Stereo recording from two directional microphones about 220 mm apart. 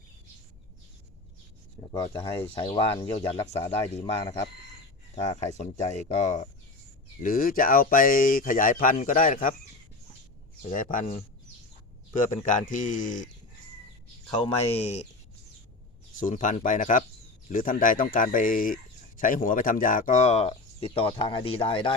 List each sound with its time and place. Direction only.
1.9 s speech: 25° left (ahead or behind)
5.5 s speech: 30° left (ahead or behind)
10.6 s speech: 35° left (ahead or behind)
12.2 s speech: 35° left (ahead or behind)
14.3 s speech: 25° left (ahead or behind)
16.1 s speech: 35° left (ahead or behind)